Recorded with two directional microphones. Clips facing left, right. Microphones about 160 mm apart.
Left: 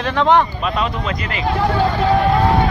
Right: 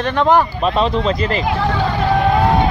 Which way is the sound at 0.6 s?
30° right (ahead or behind).